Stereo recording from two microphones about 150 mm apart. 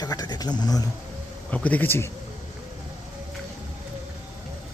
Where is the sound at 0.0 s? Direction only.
25° left (ahead or behind).